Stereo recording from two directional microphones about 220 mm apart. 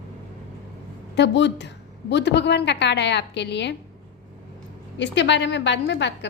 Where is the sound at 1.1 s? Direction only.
50° left (ahead or behind).